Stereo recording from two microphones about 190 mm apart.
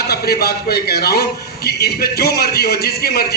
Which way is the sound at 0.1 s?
55° left (ahead or behind).